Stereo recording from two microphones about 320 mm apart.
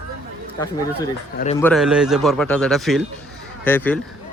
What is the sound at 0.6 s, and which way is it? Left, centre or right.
Speech, centre.